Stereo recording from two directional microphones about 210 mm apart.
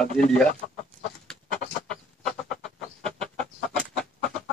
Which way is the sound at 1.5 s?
40° left (ahead or behind).